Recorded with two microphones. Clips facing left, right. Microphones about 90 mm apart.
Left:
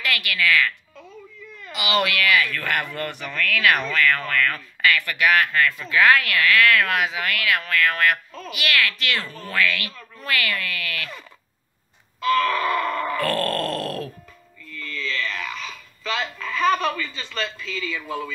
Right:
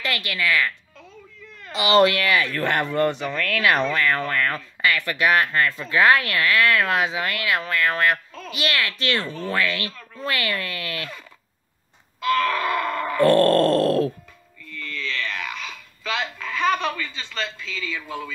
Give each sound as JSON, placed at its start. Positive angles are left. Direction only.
{"t": 0.0, "sound": "speech", "side_deg": -25}
{"t": 12.3, "sound": "groan", "side_deg": 0}
{"t": 13.2, "sound": "speech", "side_deg": -20}
{"t": 15.1, "sound": "a sound", "side_deg": -5}